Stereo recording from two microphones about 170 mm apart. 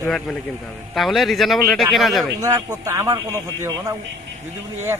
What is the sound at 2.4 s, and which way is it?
A man's voice, 20° right (ahead or behind).